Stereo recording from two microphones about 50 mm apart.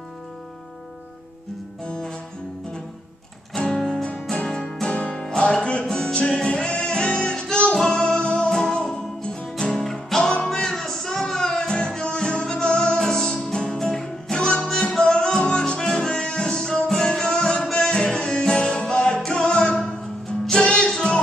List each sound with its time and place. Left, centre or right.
1.9 s music: centre
3.5 s music: centre
4.9 s music: left